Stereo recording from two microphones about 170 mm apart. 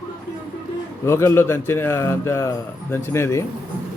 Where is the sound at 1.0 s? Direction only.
15° left (ahead or behind).